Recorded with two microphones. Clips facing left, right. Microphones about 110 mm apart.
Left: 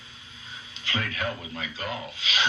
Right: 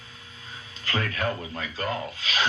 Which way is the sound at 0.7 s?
45° right (ahead or behind).